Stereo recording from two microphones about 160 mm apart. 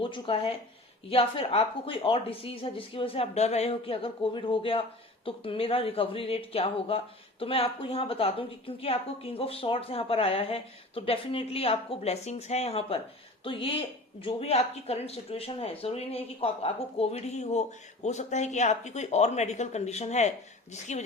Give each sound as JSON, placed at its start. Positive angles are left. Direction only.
{"t": 0.0, "sound": "speech", "side_deg": 30}